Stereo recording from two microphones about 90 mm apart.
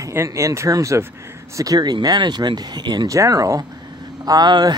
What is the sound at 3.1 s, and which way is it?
Speech, 40° right (ahead or behind).